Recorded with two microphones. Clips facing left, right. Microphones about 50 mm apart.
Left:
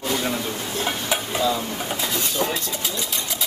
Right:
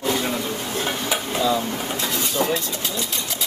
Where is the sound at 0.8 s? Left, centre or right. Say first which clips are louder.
Left 1 dB; centre.